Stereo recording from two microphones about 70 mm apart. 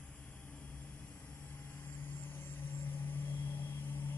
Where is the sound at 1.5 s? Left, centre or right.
Left.